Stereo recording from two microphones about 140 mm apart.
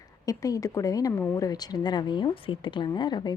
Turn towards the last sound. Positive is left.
turn(degrees=30)  # may be behind; listen again after turning